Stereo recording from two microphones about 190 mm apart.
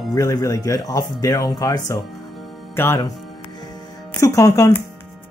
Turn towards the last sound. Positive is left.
turn(degrees=15)  # may be behind; listen again after turning